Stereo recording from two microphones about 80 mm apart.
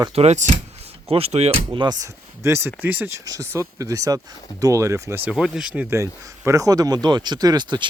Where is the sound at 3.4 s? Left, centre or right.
Right.